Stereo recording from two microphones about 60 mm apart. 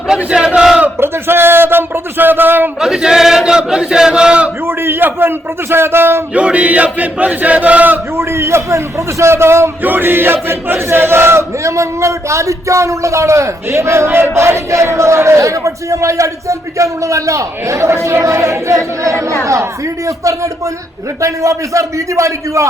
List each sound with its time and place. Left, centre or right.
0.3 s battle cry: centre
0.9 s speech: right
2.8 s chant: centre
4.6 s speech: right
6.3 s chant: right
8.1 s a man's voice: right
9.8 s battle cry: right
20.1 s battle cry: right